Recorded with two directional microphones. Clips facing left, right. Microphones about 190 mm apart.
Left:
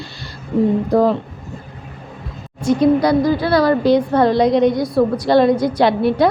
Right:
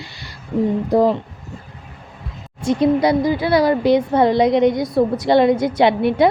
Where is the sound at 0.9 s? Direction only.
20° right (ahead or behind).